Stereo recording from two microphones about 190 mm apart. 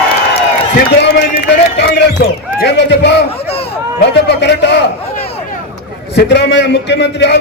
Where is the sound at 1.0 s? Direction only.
65° left (ahead or behind).